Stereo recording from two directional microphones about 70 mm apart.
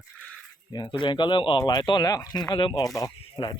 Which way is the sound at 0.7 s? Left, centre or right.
Left.